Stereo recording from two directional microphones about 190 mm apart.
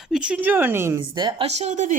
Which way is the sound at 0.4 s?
10° right (ahead or behind).